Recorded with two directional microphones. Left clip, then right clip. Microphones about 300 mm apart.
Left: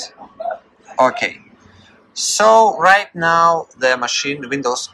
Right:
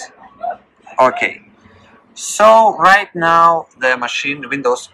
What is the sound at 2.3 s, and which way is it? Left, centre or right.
Speech, centre.